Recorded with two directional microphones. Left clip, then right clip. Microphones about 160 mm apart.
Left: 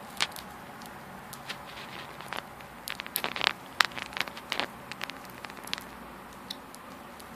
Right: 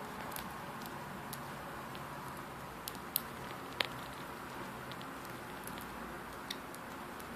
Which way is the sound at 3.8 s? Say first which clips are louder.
Left 11 dB; 35° left (ahead or behind).